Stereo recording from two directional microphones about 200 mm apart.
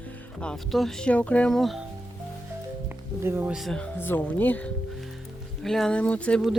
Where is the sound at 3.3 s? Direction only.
10° right (ahead or behind).